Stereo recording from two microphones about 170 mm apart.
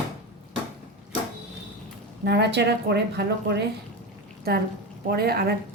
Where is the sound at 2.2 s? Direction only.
75° right (ahead or behind).